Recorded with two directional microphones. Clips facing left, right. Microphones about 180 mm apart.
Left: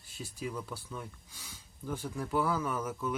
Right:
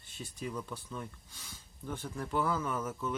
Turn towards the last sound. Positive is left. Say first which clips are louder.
# left 1 dB
turn(degrees=10)  # may be behind; listen again after turning